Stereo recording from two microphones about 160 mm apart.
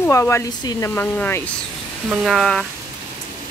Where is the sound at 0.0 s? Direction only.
15° left (ahead or behind).